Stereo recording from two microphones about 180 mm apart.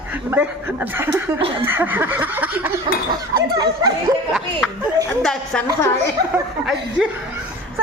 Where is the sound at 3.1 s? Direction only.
20° right (ahead or behind).